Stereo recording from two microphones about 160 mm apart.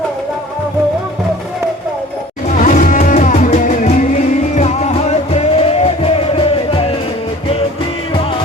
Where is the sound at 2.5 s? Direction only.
55° left (ahead or behind); by 7.0 s 35° left (ahead or behind).